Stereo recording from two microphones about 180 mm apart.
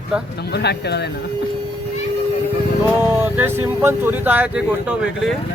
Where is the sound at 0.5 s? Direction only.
65° left (ahead or behind).